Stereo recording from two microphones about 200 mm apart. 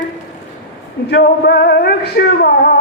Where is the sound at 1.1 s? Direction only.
55° left (ahead or behind).